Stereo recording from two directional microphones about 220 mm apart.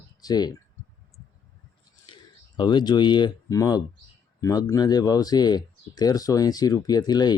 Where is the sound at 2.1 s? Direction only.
20° left (ahead or behind).